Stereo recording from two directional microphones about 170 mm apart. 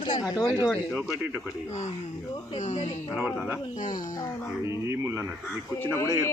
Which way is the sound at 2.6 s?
45° left (ahead or behind).